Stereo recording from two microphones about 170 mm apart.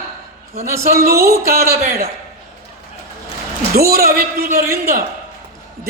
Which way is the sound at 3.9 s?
60° right (ahead or behind).